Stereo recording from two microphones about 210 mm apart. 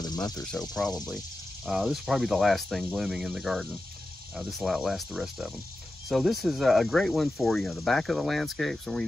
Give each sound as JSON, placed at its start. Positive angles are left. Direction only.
{"t": 0.0, "sound": "cricket", "side_deg": 20}
{"t": 0.5, "sound": "speech", "side_deg": 0}